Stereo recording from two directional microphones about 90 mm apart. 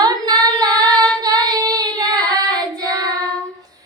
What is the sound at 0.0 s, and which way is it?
Child singing, 50° right (ahead or behind).